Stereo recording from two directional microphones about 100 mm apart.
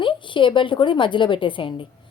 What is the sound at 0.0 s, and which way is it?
A woman's voice, 55° left (ahead or behind).